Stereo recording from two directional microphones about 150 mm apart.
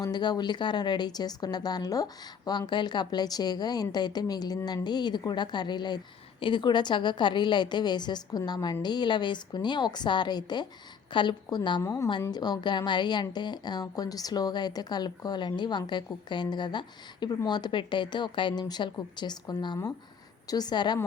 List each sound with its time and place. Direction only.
0.0 s a woman's voice: 30° left (ahead or behind)